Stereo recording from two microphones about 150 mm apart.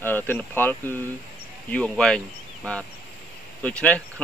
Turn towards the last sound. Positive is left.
turn(degrees=10)  # may be behind; listen again after turning